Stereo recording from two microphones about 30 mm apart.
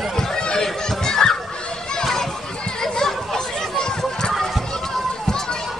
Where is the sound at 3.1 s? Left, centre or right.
Centre.